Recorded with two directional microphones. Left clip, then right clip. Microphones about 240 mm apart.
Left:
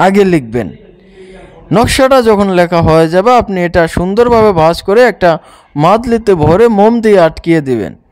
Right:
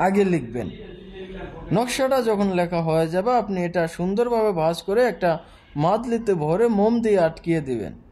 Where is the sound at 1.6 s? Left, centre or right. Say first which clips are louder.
Left 14 dB; left.